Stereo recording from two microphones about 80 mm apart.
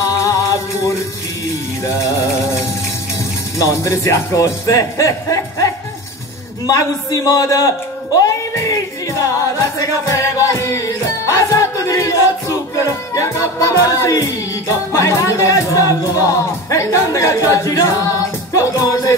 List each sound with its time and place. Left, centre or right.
0.2 s music: left
3.5 s a man's voice: left